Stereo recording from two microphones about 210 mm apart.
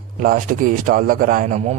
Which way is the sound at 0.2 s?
40° right (ahead or behind).